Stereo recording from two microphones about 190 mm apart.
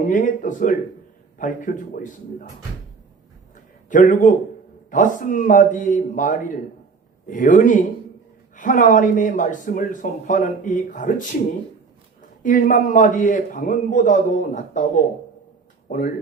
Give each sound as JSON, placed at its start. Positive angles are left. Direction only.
{"t": 0.0, "sound": "speech", "side_deg": 45}
{"t": 3.5, "sound": "a sound", "side_deg": 45}
{"t": 4.9, "sound": "speech", "side_deg": 45}
{"t": 12.4, "sound": "speech", "side_deg": 45}